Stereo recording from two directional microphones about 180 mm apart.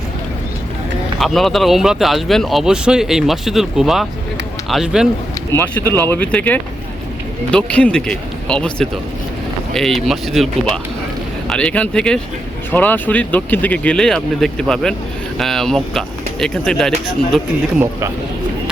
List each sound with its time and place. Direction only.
1.2 s speech: centre (ahead or behind)
5.5 s speech: 15° left (ahead or behind)